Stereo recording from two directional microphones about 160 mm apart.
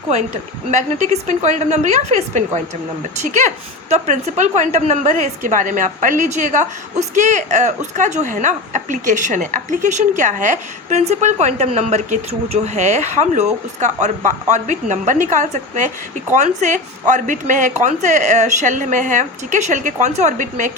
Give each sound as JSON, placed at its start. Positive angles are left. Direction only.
{"t": 0.7, "sound": "a woman's voice", "side_deg": -50}